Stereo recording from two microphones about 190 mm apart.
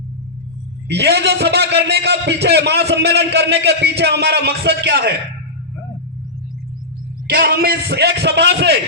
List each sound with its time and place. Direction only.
0.9 s a man's voice: 65° right (ahead or behind)
7.3 s a man's voice: 60° right (ahead or behind)